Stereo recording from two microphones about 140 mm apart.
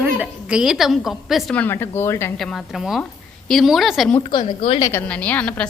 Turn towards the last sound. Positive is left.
turn(degrees=10)  # may be behind; listen again after turning